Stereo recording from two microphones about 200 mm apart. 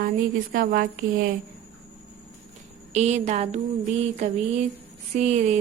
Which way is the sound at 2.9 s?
35° right (ahead or behind).